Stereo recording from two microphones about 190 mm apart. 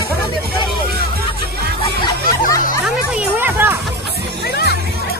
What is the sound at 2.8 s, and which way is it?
Music, 5° right (ahead or behind).